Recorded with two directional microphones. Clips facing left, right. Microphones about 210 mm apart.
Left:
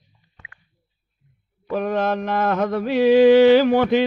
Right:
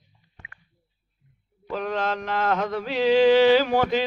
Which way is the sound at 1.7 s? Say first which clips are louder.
Left 5 dB; 55° left (ahead or behind).